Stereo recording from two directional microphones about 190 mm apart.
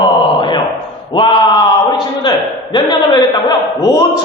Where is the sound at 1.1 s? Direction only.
25° left (ahead or behind).